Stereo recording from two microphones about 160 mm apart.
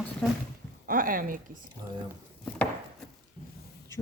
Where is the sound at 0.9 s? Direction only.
60° right (ahead or behind).